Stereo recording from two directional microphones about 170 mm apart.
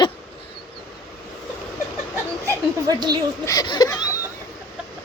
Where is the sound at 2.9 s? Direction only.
25° right (ahead or behind).